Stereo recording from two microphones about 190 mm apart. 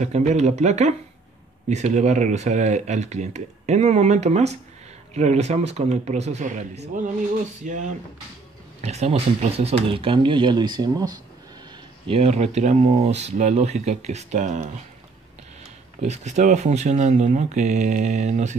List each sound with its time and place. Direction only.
0.0 s speech: 40° right (ahead or behind); by 11.1 s 20° right (ahead or behind)
12.1 s speech: 35° right (ahead or behind)
16.0 s speech: 40° right (ahead or behind)